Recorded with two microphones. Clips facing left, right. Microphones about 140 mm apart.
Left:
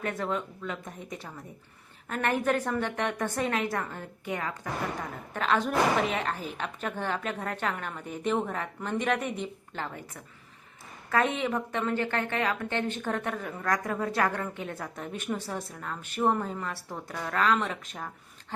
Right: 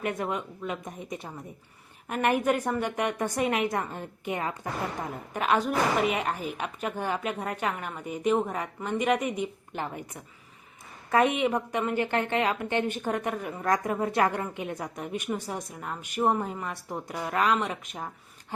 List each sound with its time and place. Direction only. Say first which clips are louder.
0.0 s a woman's voice: right 1 dB; 15° right (ahead or behind)